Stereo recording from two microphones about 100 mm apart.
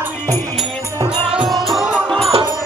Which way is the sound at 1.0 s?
55° right (ahead or behind).